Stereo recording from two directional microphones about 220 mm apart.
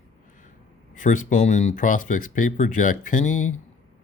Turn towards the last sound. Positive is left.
turn(degrees=35)  # may be behind; listen again after turning